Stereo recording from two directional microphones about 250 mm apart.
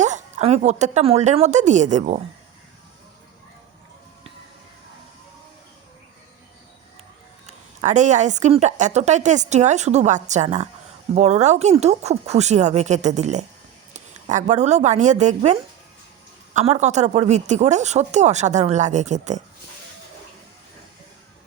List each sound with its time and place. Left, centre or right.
0.0 s a woman's voice: right
7.4 s a woman's voice: right
16.6 s a woman's voice: right